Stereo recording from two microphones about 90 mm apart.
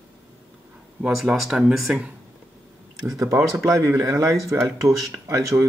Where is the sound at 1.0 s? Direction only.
5° right (ahead or behind).